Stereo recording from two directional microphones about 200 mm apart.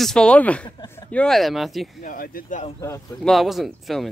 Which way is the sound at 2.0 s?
45° left (ahead or behind).